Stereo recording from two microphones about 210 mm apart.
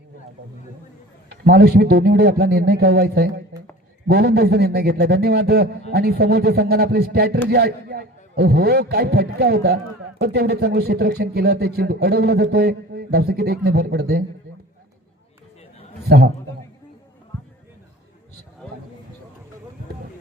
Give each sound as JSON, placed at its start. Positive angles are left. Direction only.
{"t": 1.5, "sound": "a man's voice", "side_deg": -50}
{"t": 16.0, "sound": "a man's voice", "side_deg": -50}